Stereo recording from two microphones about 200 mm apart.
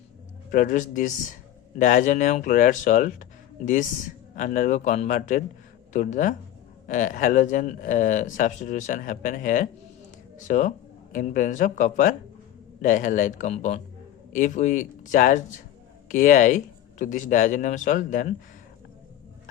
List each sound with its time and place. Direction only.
0.5 s speech: 40° left (ahead or behind)
4.4 s speech: 40° left (ahead or behind)